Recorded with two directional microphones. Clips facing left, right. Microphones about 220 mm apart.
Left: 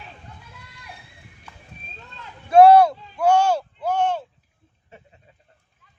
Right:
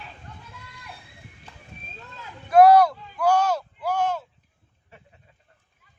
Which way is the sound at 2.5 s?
25° left (ahead or behind).